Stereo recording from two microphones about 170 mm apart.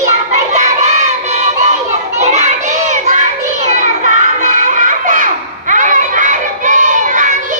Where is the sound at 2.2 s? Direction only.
45° right (ahead or behind).